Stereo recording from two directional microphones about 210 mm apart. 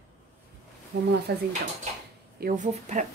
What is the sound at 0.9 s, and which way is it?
Speech, 40° right (ahead or behind).